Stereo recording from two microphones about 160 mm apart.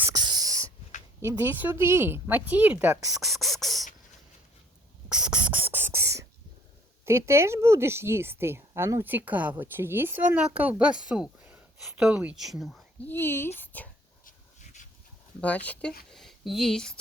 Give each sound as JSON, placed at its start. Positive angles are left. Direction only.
{"t": 0.0, "sound": "a sound", "side_deg": -25}
{"t": 1.2, "sound": "a woman's voice", "side_deg": -15}
{"t": 3.2, "sound": "speech", "side_deg": 0}
{"t": 5.0, "sound": "beatboxing", "side_deg": -5}
{"t": 7.0, "sound": "a woman's voice", "side_deg": -15}
{"t": 13.1, "sound": "speech", "side_deg": 15}
{"t": 13.6, "sound": "a sound", "side_deg": 10}
{"t": 14.3, "sound": "a sound", "side_deg": 50}
{"t": 15.4, "sound": "speech", "side_deg": 10}